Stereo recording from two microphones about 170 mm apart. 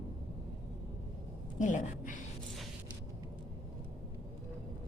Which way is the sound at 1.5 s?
45° left (ahead or behind).